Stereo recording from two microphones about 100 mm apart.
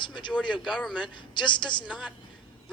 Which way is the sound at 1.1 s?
50° left (ahead or behind).